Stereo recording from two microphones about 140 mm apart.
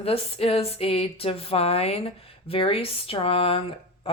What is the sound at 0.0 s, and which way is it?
Speech, 45° left (ahead or behind).